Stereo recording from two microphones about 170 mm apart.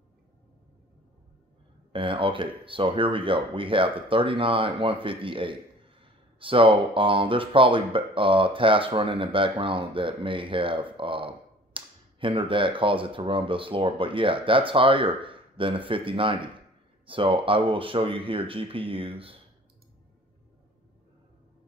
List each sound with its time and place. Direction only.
1.9 s speech: 30° right (ahead or behind)